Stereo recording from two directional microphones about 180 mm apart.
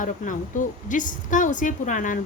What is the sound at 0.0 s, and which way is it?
A woman's voice, 45° left (ahead or behind).